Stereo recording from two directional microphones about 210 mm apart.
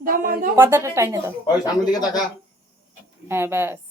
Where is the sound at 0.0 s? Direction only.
40° right (ahead or behind).